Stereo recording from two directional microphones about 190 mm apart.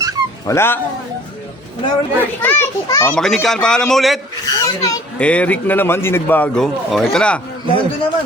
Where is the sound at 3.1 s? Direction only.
Centre (ahead or behind).